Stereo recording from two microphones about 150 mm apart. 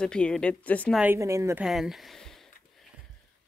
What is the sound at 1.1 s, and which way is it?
Speech, 20° right (ahead or behind).